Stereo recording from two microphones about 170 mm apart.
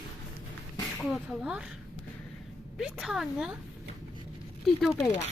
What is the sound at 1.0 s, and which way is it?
Speech, centre (ahead or behind).